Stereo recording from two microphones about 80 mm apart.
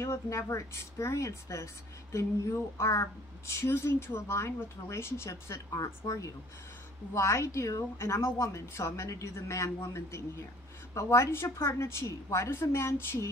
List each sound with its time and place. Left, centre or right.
0.0 s a woman's voice: left
11.8 s a woman's voice: left